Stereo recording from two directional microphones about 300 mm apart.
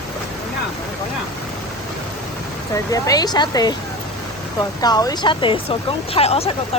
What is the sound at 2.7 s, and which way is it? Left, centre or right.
Speech, centre.